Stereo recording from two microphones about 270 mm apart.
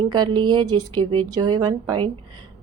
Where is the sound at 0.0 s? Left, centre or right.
Centre.